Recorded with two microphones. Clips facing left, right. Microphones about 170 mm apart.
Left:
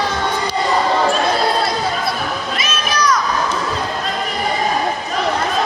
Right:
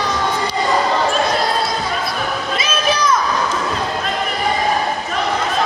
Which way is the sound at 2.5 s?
25° right (ahead or behind).